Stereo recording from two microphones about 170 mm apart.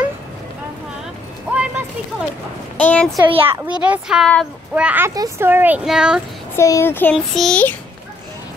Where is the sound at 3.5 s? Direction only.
10° right (ahead or behind).